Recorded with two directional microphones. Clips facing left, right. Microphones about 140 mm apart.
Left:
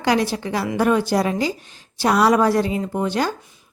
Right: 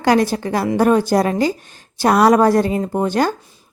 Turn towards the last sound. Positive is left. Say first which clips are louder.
# right 4 dB
turn(degrees=-45)  # may be behind; listen again after turning